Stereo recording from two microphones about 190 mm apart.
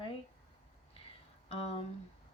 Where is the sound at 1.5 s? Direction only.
30° left (ahead or behind).